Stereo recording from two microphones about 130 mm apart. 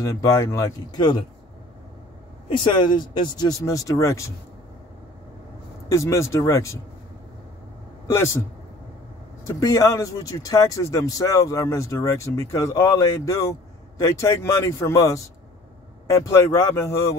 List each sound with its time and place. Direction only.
0.0 s speech: 25° left (ahead or behind)
2.5 s speech: 35° left (ahead or behind)
5.9 s speech: 25° left (ahead or behind)
9.5 s speech: 25° left (ahead or behind)